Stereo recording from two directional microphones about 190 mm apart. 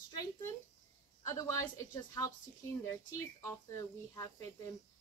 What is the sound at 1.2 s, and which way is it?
Speech, 15° left (ahead or behind).